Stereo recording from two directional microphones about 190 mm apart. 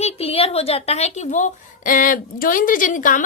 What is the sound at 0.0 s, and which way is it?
A woman's voice, 30° left (ahead or behind).